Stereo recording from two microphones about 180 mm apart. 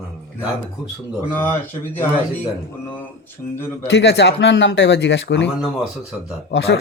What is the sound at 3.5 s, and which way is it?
Speech, 10° left (ahead or behind).